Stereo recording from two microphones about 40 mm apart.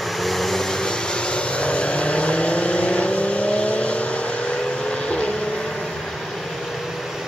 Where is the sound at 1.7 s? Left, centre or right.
Left.